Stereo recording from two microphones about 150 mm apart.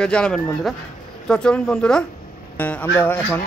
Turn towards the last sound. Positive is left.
turn(degrees=15)  # may be behind; listen again after turning